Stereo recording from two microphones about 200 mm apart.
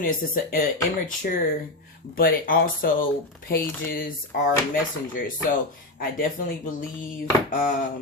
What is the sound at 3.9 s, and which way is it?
Speech, 45° left (ahead or behind).